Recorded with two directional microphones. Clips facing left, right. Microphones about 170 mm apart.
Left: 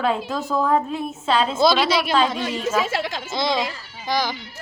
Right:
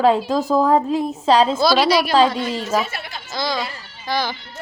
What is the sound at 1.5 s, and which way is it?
Speech, 20° left (ahead or behind).